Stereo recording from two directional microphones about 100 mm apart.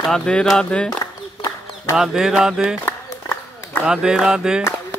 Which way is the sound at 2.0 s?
5° right (ahead or behind).